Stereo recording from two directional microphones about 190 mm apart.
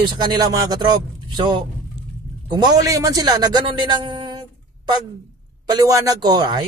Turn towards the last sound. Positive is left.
turn(degrees=-25)  # may be behind; listen again after turning